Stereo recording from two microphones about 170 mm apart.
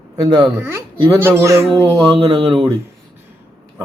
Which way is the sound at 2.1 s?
30° right (ahead or behind).